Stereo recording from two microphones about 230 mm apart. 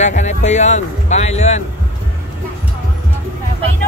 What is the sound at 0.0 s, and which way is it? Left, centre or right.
A man's voice, left.